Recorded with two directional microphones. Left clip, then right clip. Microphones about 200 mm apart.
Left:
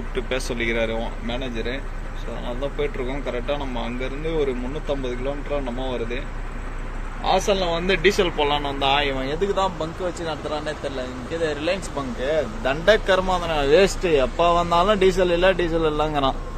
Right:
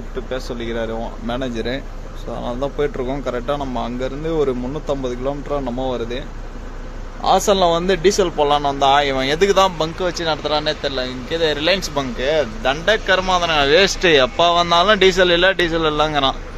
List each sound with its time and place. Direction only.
0.1 s a man's voice: 5° right (ahead or behind)
1.2 s speech: 25° right (ahead or behind)
12.8 s a man's voice: 10° left (ahead or behind)
14.1 s a man's voice: 5° right (ahead or behind); by 16.3 s 10° left (ahead or behind)